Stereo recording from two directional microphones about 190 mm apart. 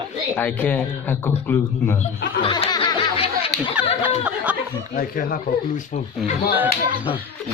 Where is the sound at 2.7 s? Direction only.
25° left (ahead or behind).